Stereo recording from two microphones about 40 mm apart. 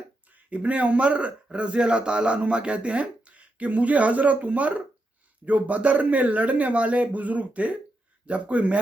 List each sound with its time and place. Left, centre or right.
0.3 s a man's voice: right